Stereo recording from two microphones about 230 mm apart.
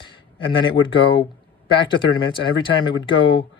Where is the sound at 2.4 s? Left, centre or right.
Left.